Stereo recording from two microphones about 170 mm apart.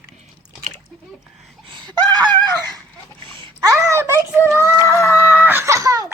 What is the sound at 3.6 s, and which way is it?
A child's voice, 15° right (ahead or behind).